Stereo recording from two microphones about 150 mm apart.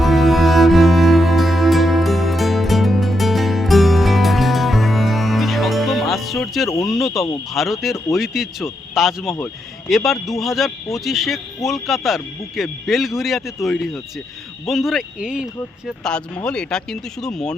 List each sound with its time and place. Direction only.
0.0 s music: centre (ahead or behind)
6.8 s a sound: centre (ahead or behind)
7.5 s speech: centre (ahead or behind)
16.0 s speech: 5° left (ahead or behind)